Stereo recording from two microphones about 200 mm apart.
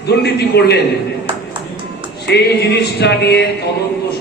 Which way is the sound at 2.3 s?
55° left (ahead or behind).